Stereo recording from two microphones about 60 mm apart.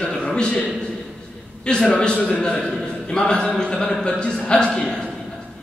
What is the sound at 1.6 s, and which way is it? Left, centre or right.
A man's voice, centre.